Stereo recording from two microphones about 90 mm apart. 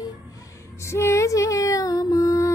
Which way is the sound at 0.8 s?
30° left (ahead or behind).